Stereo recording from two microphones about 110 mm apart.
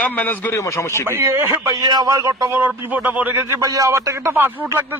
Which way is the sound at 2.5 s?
15° right (ahead or behind).